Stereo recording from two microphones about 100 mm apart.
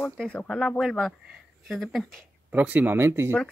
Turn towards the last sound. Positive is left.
turn(degrees=-25)  # may be behind; listen again after turning